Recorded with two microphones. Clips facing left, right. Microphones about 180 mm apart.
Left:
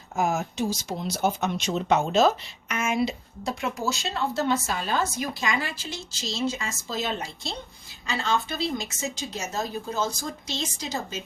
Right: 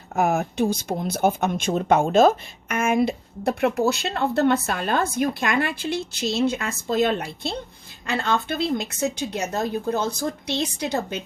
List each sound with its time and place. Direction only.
0.2 s speech: 60° right (ahead or behind)